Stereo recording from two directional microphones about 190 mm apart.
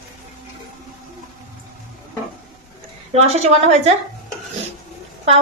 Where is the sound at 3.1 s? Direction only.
35° right (ahead or behind).